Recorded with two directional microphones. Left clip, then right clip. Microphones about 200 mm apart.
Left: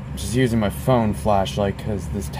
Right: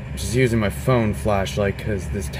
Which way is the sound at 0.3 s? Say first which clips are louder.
Right 1 dB; 25° right (ahead or behind).